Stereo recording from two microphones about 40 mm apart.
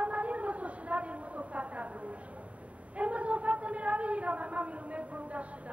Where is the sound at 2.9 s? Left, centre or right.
Right.